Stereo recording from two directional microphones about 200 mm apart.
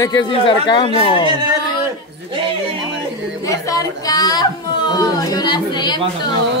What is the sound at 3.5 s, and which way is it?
A woman's voice, 15° left (ahead or behind).